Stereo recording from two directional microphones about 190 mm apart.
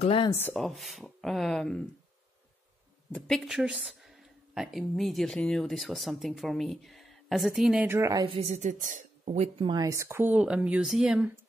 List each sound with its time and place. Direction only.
0.0 s speech: 30° left (ahead or behind)
0.3 s speech: 10° left (ahead or behind)
0.6 s a woman's voice: centre (ahead or behind)
3.1 s a woman's voice: 5° left (ahead or behind); by 8.4 s 20° right (ahead or behind)
8.4 s speech: 40° right (ahead or behind)
9.6 s speech: 20° right (ahead or behind); by 11.3 s 5° right (ahead or behind)